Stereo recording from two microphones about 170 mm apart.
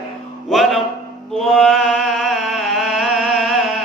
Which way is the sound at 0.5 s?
Centre (ahead or behind).